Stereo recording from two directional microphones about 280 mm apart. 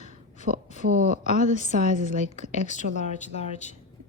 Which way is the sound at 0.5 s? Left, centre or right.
Right.